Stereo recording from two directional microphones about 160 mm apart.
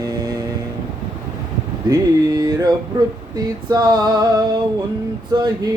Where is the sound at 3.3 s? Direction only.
25° right (ahead or behind).